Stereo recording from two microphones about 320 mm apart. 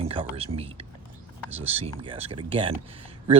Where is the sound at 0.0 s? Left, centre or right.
Centre.